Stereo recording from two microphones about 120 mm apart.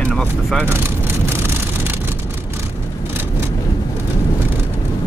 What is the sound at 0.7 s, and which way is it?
Vehicle, 20° right (ahead or behind).